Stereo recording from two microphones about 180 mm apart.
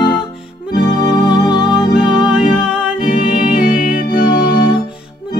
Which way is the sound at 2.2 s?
5° right (ahead or behind).